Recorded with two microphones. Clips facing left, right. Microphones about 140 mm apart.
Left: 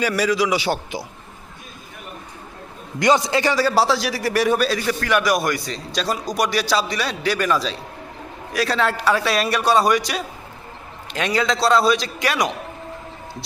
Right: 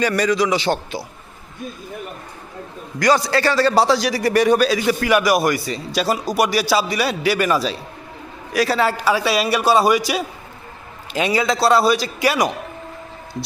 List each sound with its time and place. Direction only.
0.0 s a man's voice: 5° left (ahead or behind)
3.0 s a man's voice: 20° left (ahead or behind); by 4.8 s centre (ahead or behind)
4.9 s a man's voice: 10° right (ahead or behind)